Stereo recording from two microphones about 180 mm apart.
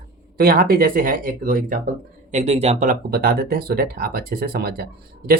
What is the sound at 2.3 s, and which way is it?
Speech, 35° right (ahead or behind).